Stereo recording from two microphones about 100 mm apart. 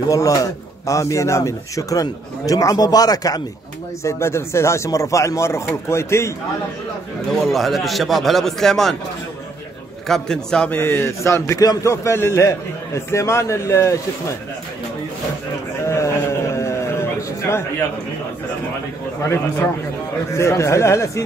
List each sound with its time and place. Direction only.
0.1 s a man's voice: 35° left (ahead or behind)
4.0 s a man's voice: 25° left (ahead or behind)
7.4 s speech: centre (ahead or behind)
10.0 s a man's voice: 5° left (ahead or behind)
10.8 s a man's voice: 25° left (ahead or behind)
15.9 s a sound: 30° left (ahead or behind)
19.2 s a man's voice: 25° left (ahead or behind)